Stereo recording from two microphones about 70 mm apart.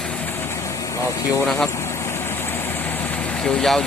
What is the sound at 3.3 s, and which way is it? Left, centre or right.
Speech, centre.